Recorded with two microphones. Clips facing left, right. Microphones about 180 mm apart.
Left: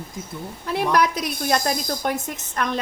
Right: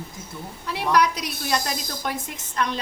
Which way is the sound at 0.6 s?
50° left (ahead or behind).